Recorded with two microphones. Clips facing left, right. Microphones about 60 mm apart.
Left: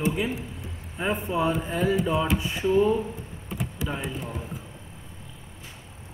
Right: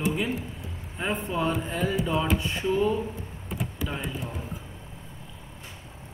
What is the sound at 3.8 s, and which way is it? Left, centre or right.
Speech, centre.